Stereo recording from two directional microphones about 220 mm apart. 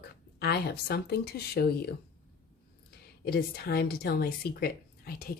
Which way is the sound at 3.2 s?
45° left (ahead or behind).